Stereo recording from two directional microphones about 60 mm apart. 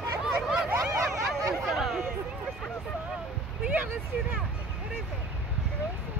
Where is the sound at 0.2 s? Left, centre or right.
Centre.